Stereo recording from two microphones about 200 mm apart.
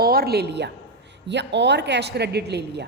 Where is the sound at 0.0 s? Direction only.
50° right (ahead or behind).